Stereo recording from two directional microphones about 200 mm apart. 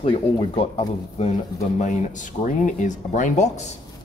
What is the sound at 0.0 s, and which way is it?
Speech, 30° left (ahead or behind).